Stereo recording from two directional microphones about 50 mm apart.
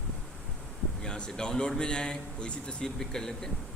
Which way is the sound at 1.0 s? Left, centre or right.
Centre.